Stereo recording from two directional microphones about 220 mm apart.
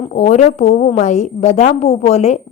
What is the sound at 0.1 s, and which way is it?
A woman's voice, 35° left (ahead or behind).